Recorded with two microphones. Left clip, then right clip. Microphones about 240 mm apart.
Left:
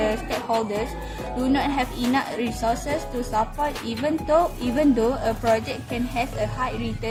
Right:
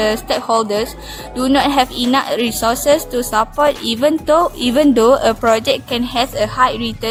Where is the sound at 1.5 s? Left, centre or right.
Right.